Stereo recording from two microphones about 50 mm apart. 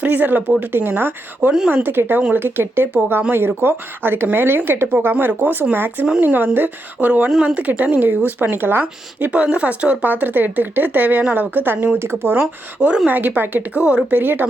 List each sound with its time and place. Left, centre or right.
0.0 s speech: right
8.4 s speech: right
9.3 s speech: right
13.1 s speech: right